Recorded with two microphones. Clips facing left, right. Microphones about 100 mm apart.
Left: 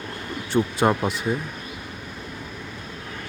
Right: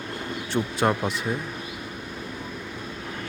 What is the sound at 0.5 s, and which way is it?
Speech, centre (ahead or behind).